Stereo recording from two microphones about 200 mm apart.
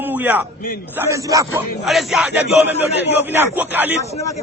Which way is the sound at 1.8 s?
Centre (ahead or behind).